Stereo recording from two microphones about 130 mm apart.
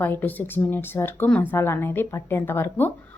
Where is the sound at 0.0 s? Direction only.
15° left (ahead or behind).